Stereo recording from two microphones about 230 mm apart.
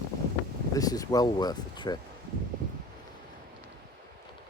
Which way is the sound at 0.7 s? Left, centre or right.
Centre.